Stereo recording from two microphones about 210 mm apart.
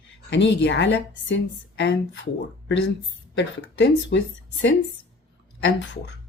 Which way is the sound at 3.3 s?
55° left (ahead or behind).